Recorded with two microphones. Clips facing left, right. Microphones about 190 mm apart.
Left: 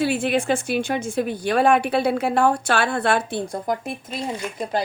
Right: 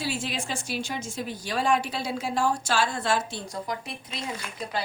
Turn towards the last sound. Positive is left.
turn(degrees=50)  # may be behind; listen again after turning